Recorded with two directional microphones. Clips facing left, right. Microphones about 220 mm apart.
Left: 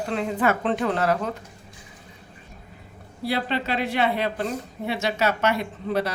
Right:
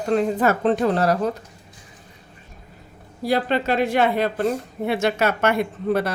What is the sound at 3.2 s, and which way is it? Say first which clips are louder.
Speech: right 5 dB; 45° right (ahead or behind).